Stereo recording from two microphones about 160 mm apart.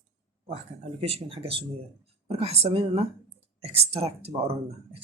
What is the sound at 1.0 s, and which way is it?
Speech, 40° right (ahead or behind).